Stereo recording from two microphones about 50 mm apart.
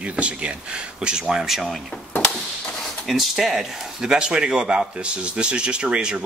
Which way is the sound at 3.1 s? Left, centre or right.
Centre.